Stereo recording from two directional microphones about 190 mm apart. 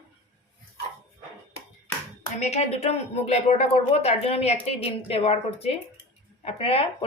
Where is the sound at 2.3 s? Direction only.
35° left (ahead or behind).